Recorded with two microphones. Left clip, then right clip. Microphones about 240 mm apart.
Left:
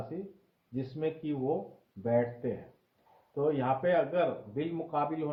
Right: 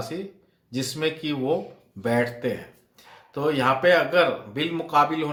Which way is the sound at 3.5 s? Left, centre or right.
Centre.